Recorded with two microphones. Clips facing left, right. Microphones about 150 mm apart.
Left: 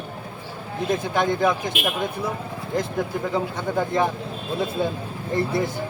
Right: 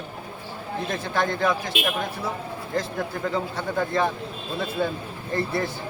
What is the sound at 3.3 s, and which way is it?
Speech, 15° left (ahead or behind).